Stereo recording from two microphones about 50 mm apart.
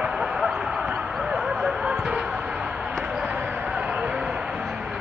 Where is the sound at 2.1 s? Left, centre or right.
Centre.